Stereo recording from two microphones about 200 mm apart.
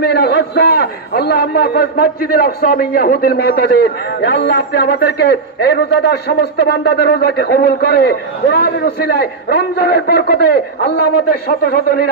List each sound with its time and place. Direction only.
0.0 s a man's voice: 50° left (ahead or behind)